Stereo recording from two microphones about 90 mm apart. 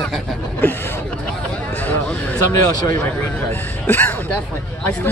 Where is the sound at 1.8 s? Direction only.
15° left (ahead or behind).